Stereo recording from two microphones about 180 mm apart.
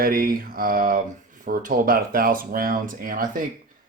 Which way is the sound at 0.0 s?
55° right (ahead or behind).